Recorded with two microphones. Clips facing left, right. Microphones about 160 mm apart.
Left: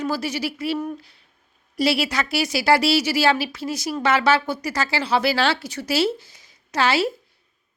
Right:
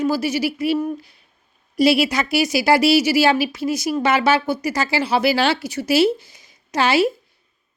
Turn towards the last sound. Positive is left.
turn(degrees=-15)  # may be behind; listen again after turning